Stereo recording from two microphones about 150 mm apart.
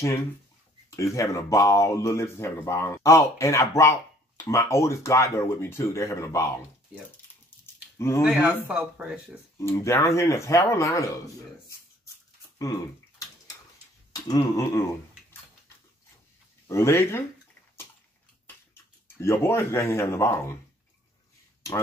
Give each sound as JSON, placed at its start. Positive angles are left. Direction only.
{"t": 0.8, "sound": "speech", "side_deg": 20}
{"t": 8.2, "sound": "speech", "side_deg": -10}
{"t": 9.6, "sound": "speech", "side_deg": 20}
{"t": 14.1, "sound": "speech", "side_deg": 25}
{"t": 16.6, "sound": "speech", "side_deg": 15}
{"t": 19.1, "sound": "speech", "side_deg": 15}